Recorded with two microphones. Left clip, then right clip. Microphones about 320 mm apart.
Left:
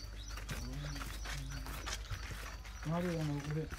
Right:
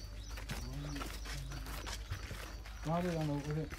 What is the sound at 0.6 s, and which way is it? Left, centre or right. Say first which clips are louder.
Clip-clop: right 1 dB; centre.